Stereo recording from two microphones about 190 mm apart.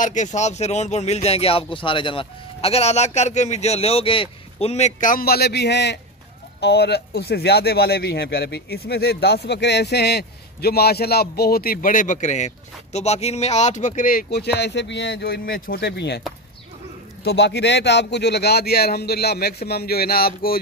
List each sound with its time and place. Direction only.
0.0 s speech: 40° left (ahead or behind); by 16.2 s 60° left (ahead or behind)
17.2 s speech: 60° left (ahead or behind)